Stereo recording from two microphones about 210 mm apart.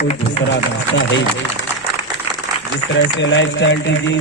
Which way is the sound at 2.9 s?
60° left (ahead or behind).